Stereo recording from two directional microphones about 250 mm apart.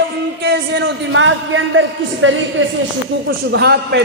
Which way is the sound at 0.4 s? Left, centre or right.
Right.